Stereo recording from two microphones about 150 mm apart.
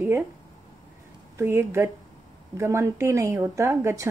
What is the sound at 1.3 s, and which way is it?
Speech, 20° right (ahead or behind).